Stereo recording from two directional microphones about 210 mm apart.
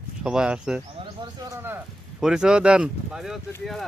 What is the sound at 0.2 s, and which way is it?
Speech, 5° right (ahead or behind).